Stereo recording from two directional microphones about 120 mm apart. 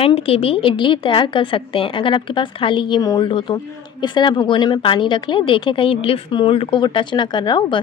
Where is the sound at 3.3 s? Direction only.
45° left (ahead or behind).